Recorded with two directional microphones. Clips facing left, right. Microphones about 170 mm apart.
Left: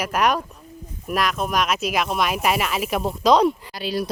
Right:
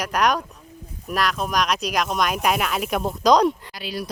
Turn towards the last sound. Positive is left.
turn(degrees=30)  # may be behind; listen again after turning